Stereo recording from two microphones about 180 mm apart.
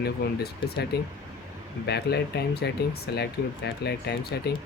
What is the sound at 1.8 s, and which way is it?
Speech, 65° left (ahead or behind).